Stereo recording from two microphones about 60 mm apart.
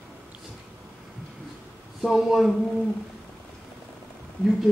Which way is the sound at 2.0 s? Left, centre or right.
Centre.